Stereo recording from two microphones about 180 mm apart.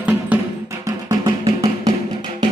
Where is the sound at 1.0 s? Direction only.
20° right (ahead or behind).